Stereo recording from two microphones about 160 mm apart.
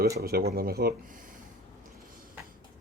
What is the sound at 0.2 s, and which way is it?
Speech, 75° right (ahead or behind).